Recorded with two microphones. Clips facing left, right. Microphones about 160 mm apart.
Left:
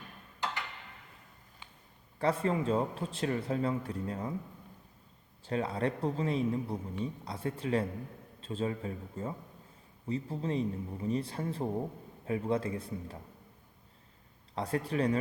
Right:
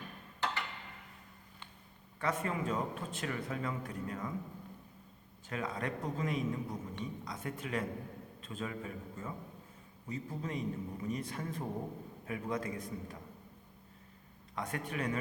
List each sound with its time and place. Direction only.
2.1 s speech: 30° left (ahead or behind)
5.5 s a man's voice: 30° left (ahead or behind)
14.5 s speech: 30° left (ahead or behind)